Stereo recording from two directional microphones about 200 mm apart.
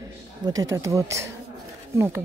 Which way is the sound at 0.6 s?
15° right (ahead or behind).